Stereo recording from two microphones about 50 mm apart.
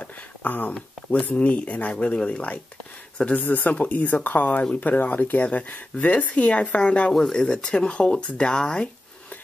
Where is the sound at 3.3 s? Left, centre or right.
Left; by 8.9 s centre.